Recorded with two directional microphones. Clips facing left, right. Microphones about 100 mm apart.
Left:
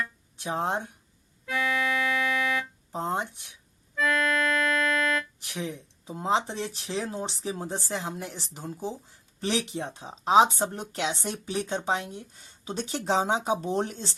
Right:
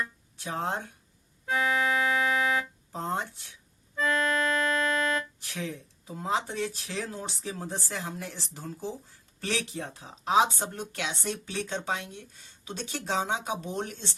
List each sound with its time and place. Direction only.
0.3 s speech: 20° left (ahead or behind)
1.5 s organ: 30° right (ahead or behind)
2.9 s speech: 15° left (ahead or behind)
3.9 s accordion: 30° right (ahead or behind)
5.5 s speech: 20° left (ahead or behind)